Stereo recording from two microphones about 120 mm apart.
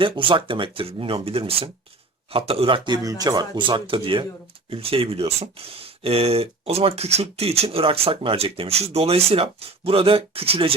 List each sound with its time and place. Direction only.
0.0 s speech: 45° right (ahead or behind)